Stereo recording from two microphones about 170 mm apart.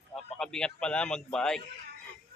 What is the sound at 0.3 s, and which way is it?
A man's voice, 5° left (ahead or behind).